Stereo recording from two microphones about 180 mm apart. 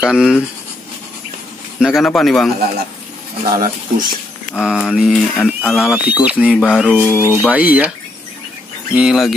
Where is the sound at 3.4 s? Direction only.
50° right (ahead or behind).